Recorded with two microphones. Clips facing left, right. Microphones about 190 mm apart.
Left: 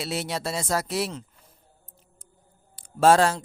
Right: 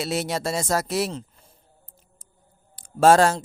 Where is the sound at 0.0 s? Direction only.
45° right (ahead or behind).